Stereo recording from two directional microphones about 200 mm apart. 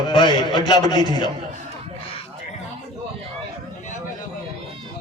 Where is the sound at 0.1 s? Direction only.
20° left (ahead or behind).